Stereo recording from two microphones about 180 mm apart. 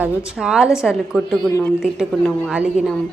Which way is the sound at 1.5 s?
15° left (ahead or behind).